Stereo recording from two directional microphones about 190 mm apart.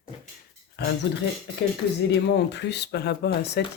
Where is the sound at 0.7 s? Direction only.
60° left (ahead or behind).